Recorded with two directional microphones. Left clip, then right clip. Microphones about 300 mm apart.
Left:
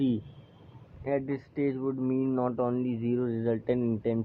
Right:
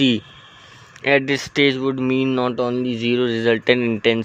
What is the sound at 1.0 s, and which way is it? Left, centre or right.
Speech, right.